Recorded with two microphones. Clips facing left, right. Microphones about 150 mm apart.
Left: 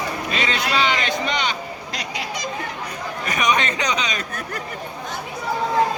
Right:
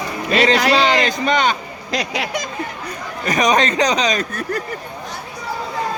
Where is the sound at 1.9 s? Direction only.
90° right.